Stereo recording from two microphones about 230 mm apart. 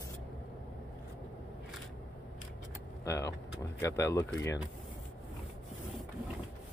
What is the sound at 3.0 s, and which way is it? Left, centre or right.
Vehicle, centre.